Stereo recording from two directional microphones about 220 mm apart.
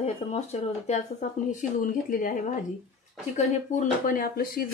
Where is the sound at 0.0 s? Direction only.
30° left (ahead or behind).